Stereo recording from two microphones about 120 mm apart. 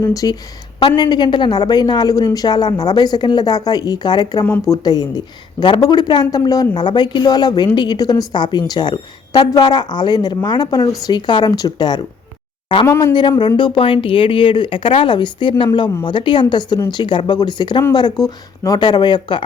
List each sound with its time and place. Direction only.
0.0 s speech: 30° left (ahead or behind)
0.8 s a woman's voice: 40° left (ahead or behind)